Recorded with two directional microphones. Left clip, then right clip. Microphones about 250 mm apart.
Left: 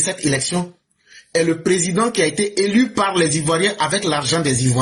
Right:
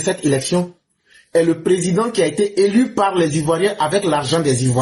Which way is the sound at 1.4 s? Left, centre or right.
Left.